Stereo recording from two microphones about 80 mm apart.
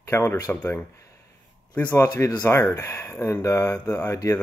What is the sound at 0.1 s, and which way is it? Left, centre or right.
Speech, left.